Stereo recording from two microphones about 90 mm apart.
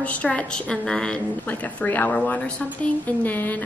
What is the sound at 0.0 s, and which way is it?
A woman's voice, 15° left (ahead or behind).